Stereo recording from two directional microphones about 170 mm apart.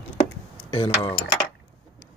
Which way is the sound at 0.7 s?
30° left (ahead or behind).